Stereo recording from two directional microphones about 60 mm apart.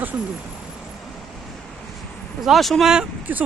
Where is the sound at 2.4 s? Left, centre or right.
Centre.